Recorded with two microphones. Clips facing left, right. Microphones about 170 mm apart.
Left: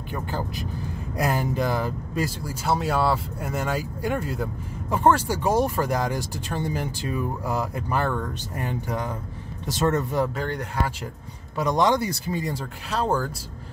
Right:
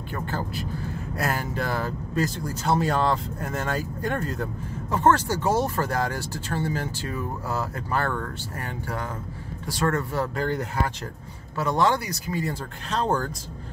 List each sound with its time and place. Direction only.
0.1 s speech: 15° left (ahead or behind)
10.3 s speech: centre (ahead or behind)
11.5 s speech: 15° left (ahead or behind)
12.4 s speech: 10° left (ahead or behind)